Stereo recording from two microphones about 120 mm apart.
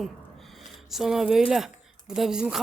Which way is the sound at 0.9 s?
Centre (ahead or behind).